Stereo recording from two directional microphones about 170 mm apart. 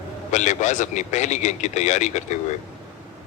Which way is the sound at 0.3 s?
45° left (ahead or behind).